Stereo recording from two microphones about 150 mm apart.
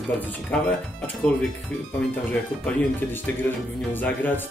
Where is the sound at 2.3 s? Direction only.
10° left (ahead or behind).